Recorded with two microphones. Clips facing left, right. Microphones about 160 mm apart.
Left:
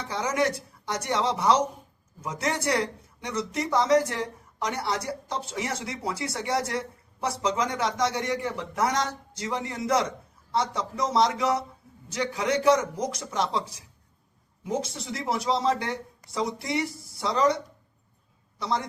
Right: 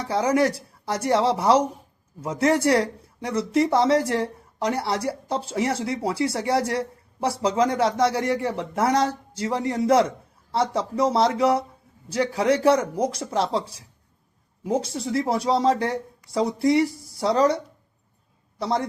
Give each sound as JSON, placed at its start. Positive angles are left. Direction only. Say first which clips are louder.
{"t": 0.1, "sound": "speech", "louder": "right 6 dB", "side_deg": -35}
{"t": 18.6, "sound": "speech", "louder": "right 4 dB", "side_deg": -35}